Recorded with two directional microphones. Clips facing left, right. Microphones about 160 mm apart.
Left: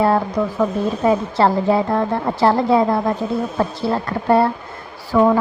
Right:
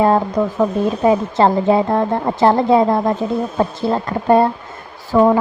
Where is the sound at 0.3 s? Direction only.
20° right (ahead or behind).